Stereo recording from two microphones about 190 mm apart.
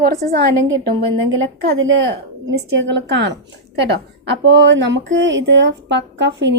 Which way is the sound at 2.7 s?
70° right (ahead or behind).